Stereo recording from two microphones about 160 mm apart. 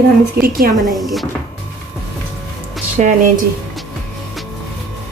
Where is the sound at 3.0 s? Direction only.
55° right (ahead or behind).